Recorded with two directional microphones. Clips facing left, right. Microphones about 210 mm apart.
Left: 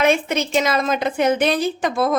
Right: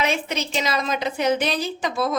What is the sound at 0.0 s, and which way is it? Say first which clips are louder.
A woman's voice: left 6 dB; 50° left (ahead or behind).